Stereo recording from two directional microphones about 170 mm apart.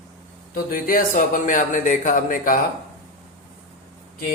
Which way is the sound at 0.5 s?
55° left (ahead or behind).